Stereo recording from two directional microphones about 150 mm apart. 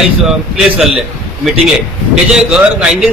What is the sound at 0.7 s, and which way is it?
A man's voice, centre (ahead or behind).